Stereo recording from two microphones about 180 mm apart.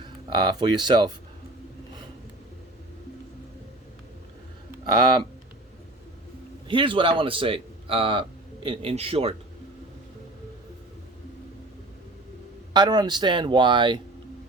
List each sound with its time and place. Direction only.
0.0 s speech: 25° right (ahead or behind)
4.9 s a man's voice: 25° right (ahead or behind)
6.7 s a man's voice: 30° right (ahead or behind)
12.7 s a man's voice: 25° right (ahead or behind)